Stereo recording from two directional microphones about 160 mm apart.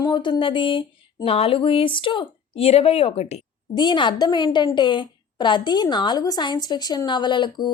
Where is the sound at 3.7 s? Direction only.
25° left (ahead or behind).